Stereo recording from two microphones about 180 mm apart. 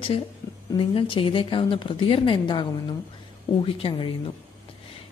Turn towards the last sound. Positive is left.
turn(degrees=30)  # may be behind; listen again after turning